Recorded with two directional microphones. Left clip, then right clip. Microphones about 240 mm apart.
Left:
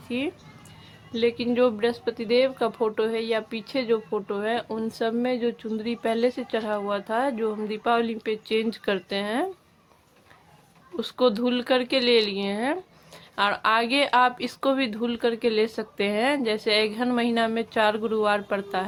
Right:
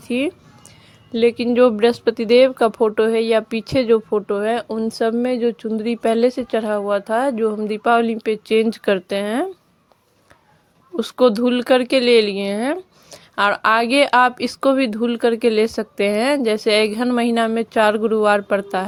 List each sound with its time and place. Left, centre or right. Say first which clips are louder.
0.1 s speech: right 8 dB; right
10.9 s speech: right 7 dB; right